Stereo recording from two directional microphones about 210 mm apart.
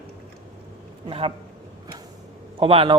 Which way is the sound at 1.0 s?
25° right (ahead or behind).